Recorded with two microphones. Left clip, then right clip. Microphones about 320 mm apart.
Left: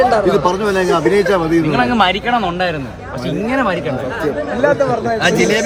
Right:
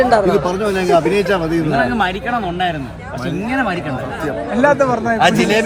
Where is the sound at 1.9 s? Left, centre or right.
Left.